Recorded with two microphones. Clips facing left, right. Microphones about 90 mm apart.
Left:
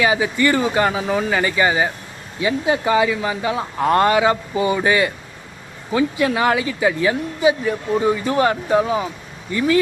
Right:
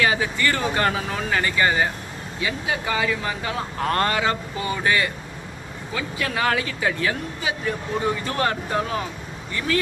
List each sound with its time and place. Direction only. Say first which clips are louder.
0.0 s speech: left 4 dB; 15° left (ahead or behind)